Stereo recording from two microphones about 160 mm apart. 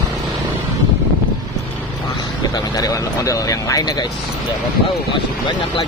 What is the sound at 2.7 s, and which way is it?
Speech, 20° left (ahead or behind).